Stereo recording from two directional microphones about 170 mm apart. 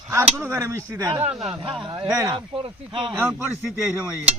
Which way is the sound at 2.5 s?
30° right (ahead or behind).